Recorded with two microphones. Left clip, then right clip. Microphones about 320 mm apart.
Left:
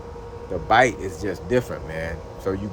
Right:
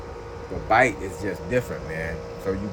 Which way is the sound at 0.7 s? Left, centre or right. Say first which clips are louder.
Left 2 dB; centre.